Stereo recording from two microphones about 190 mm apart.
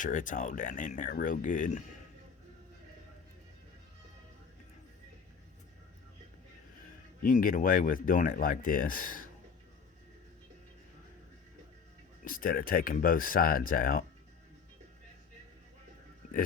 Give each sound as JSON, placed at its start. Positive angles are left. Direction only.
{"t": 0.0, "sound": "speech", "side_deg": 45}
{"t": 7.2, "sound": "speech", "side_deg": 45}
{"t": 12.2, "sound": "speech", "side_deg": 50}